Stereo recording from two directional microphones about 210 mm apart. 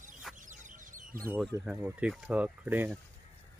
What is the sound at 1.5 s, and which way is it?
Speech, 5° right (ahead or behind).